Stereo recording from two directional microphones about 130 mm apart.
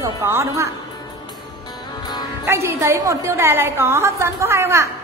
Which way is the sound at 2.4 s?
20° right (ahead or behind).